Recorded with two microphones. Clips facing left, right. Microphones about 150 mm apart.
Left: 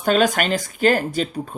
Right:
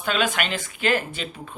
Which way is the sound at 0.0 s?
40° left (ahead or behind).